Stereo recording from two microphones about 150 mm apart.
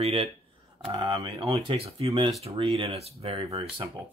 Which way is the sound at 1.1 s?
25° right (ahead or behind).